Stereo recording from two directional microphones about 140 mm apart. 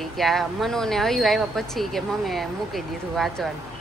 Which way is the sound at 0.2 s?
Centre (ahead or behind).